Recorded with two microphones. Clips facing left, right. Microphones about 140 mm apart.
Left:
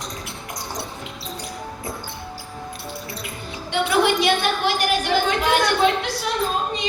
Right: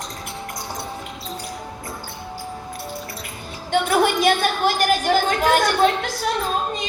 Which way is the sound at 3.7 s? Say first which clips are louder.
Right 1 dB; 45° right (ahead or behind).